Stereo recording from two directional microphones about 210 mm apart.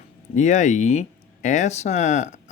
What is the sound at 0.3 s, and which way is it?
Speech, 35° left (ahead or behind).